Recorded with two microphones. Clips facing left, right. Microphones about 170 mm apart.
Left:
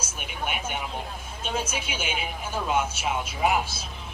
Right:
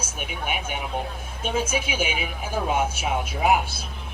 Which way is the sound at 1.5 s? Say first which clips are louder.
Right 5 dB; 55° right (ahead or behind).